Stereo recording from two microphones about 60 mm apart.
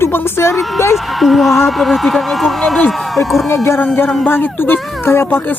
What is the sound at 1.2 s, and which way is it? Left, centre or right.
Speech, centre.